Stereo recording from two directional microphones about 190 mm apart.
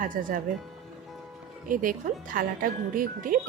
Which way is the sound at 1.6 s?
45° right (ahead or behind).